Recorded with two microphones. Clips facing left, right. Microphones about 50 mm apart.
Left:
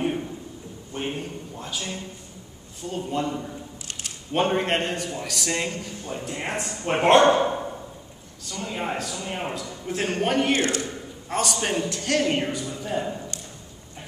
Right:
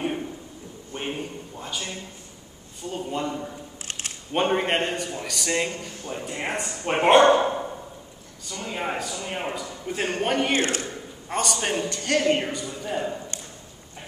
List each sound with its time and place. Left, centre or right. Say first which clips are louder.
0.9 s a sound: left 1 dB; centre
2.8 s a man's voice: left 1 dB; centre
10.5 s a man's voice: left 1 dB; right
11.2 s a man's voice: even; centre